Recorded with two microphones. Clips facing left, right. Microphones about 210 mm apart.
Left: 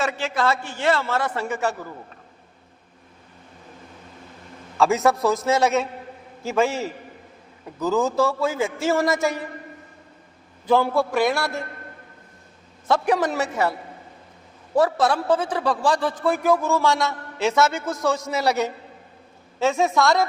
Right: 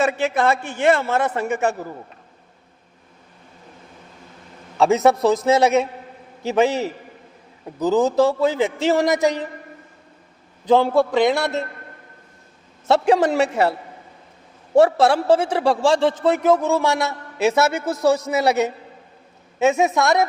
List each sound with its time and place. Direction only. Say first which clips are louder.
0.0 s a man's voice: right 5 dB; 20° right (ahead or behind)
4.8 s a man's voice: right 3 dB; 20° right (ahead or behind)
10.7 s a man's voice: right 4 dB; 20° right (ahead or behind)
12.9 s a man's voice: right 4 dB; 25° right (ahead or behind)
14.8 s a man's voice: right 5 dB; 25° right (ahead or behind)